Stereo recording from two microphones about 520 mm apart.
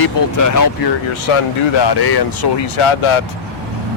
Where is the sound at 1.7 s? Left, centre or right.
Left.